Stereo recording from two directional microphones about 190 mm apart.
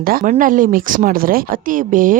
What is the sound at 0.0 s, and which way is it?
Speech, 50° right (ahead or behind).